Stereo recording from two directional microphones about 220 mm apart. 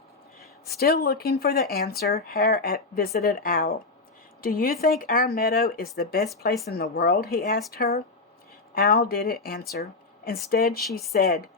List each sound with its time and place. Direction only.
0.8 s speech: 45° left (ahead or behind)